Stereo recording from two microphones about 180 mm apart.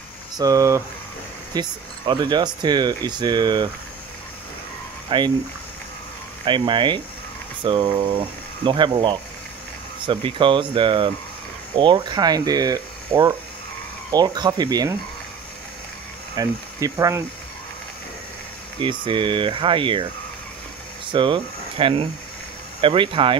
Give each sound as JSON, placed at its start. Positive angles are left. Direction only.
{"t": 0.4, "sound": "speech", "side_deg": -20}
{"t": 5.1, "sound": "speech", "side_deg": -25}
{"t": 6.4, "sound": "speech", "side_deg": -25}
{"t": 16.3, "sound": "speech", "side_deg": -20}
{"t": 18.8, "sound": "speech", "side_deg": -25}
{"t": 21.1, "sound": "speech", "side_deg": -25}